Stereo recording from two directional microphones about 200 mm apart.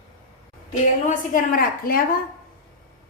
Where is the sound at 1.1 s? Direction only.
45° left (ahead or behind).